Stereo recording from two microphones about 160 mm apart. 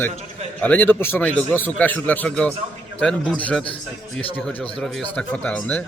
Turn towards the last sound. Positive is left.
turn(degrees=10)  # may be behind; listen again after turning